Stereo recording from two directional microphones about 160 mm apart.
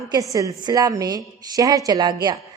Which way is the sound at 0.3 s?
20° right (ahead or behind).